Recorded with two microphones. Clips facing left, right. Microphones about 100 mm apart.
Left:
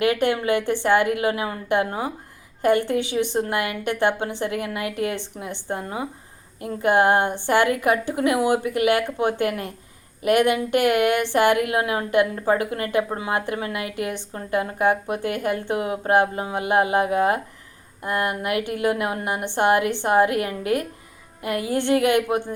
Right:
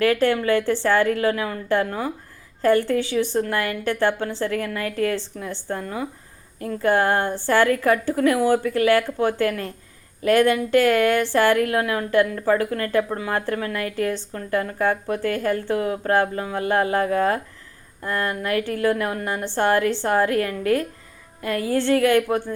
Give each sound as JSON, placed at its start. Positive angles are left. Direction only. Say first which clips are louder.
{"t": 0.0, "sound": "a woman's voice", "louder": "right 2 dB", "side_deg": 15}